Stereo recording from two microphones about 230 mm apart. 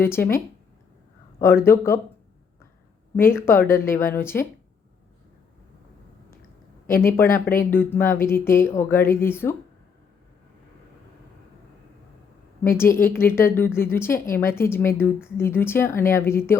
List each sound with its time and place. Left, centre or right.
0.0 s speech: centre
1.6 s speech: centre
3.2 s speech: centre
6.8 s speech: left
7.1 s speech: centre
12.6 s speech: centre